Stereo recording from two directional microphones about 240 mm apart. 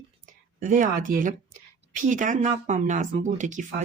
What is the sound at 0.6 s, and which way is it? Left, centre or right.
Speech, right.